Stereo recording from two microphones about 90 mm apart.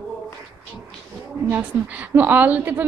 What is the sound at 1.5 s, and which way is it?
A woman's voice, 20° right (ahead or behind).